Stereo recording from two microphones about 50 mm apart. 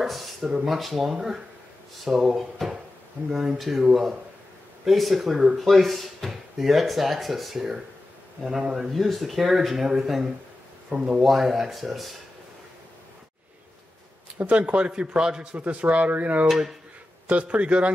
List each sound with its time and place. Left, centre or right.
0.0 s a sound: centre
0.7 s a man's voice: centre
3.5 s a man's voice: centre
8.9 s a man's voice: centre
10.9 s a man's voice: centre
11.2 s speech: centre
14.4 s speech: right
15.5 s speech: right
16.4 s speech: centre
17.3 s speech: right